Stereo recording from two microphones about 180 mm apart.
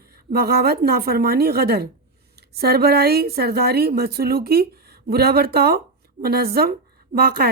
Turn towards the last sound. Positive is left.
turn(degrees=-55)  # may be behind; listen again after turning